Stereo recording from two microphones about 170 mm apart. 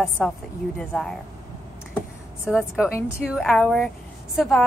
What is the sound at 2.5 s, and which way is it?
Speech, 5° right (ahead or behind).